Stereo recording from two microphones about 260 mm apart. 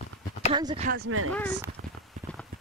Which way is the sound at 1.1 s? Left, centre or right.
Right.